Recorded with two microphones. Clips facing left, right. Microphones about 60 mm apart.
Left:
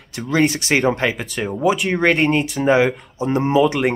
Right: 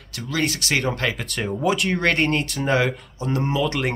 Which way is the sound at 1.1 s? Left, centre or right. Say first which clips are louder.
Left 3 dB; centre.